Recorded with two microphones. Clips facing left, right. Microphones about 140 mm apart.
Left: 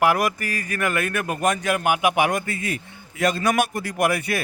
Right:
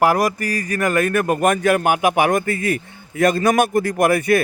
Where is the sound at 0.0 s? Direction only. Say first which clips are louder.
Right 4 dB; 35° right (ahead or behind).